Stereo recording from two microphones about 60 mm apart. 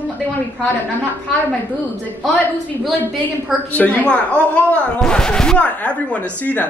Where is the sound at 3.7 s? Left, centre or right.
Left.